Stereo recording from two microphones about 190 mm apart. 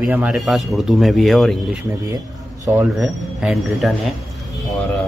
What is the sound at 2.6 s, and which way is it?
Speech, 10° right (ahead or behind).